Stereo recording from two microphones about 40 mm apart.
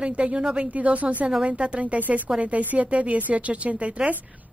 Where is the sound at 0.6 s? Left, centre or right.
Right.